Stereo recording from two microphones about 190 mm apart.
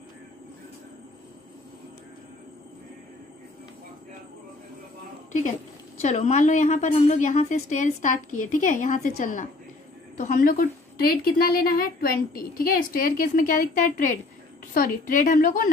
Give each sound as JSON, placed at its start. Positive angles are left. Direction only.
{"t": 6.0, "sound": "a woman's voice", "side_deg": 40}